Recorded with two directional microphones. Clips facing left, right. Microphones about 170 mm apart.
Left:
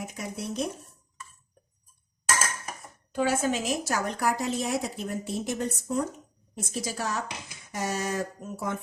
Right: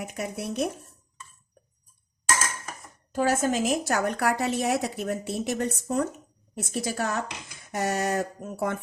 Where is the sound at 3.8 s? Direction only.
65° right (ahead or behind).